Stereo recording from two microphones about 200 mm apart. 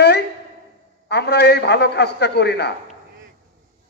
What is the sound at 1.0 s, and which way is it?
A man's voice, 55° left (ahead or behind).